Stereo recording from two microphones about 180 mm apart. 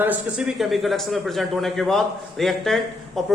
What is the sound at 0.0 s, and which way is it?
A man's voice, 5° right (ahead or behind).